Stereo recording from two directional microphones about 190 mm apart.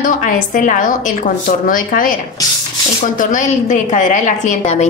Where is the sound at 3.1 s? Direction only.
40° left (ahead or behind).